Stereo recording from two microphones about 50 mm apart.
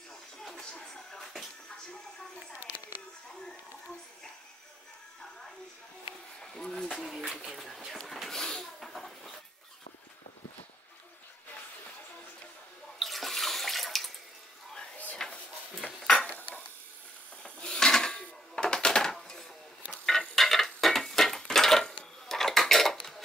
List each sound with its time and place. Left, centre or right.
0.6 s music: centre
6.4 s a sound: centre
13.0 s water: centre
15.2 s drawer open or close: centre
16.3 s cutlery: left
17.4 s a sound: centre